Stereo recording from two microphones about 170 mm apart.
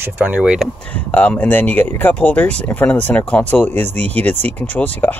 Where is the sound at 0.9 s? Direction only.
10° left (ahead or behind).